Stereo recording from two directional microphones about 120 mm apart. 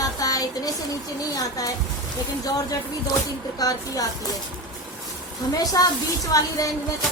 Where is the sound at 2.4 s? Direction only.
30° left (ahead or behind).